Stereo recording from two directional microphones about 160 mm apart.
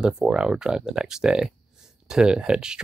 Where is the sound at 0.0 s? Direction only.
5° right (ahead or behind).